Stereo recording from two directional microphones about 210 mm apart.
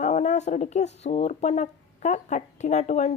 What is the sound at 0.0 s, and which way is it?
A woman's voice, 35° left (ahead or behind).